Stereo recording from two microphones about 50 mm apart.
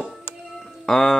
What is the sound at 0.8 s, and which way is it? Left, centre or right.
Music, centre.